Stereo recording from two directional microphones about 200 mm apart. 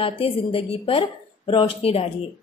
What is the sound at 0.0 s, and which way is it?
A woman's voice, 25° left (ahead or behind).